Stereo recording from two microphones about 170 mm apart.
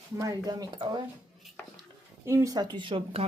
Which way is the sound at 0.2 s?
20° right (ahead or behind).